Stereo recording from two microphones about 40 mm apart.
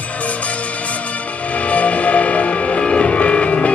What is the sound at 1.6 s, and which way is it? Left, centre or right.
Music, left.